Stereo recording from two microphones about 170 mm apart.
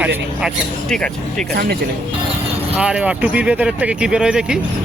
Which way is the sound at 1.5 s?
70° right (ahead or behind).